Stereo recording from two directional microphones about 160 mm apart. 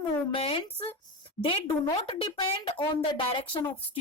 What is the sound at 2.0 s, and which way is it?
Speech, 30° left (ahead or behind).